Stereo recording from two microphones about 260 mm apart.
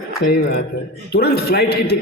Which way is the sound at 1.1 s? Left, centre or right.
Left.